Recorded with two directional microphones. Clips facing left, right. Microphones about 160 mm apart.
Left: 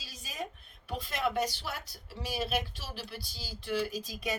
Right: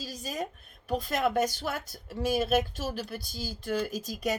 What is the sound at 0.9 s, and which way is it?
Speech, 45° right (ahead or behind).